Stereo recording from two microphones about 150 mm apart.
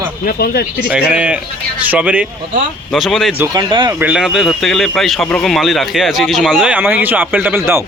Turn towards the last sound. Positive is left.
turn(degrees=-15)  # may be behind; listen again after turning